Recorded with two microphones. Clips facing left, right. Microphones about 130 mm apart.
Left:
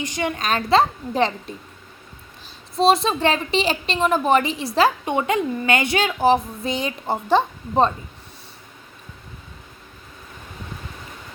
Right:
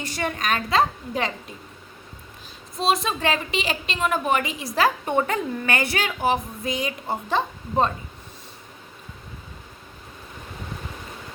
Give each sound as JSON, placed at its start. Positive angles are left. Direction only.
{"t": 0.0, "sound": "speech", "side_deg": 15}
{"t": 2.7, "sound": "speech", "side_deg": 30}